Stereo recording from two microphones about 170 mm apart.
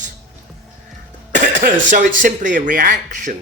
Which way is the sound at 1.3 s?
50° right (ahead or behind).